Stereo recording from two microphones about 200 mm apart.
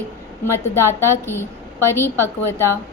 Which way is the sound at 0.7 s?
10° left (ahead or behind).